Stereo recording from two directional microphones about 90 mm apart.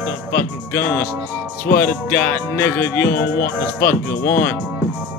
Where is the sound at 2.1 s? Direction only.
20° left (ahead or behind).